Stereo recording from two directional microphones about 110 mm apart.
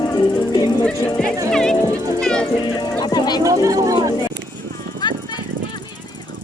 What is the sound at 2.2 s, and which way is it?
Music, 5° left (ahead or behind).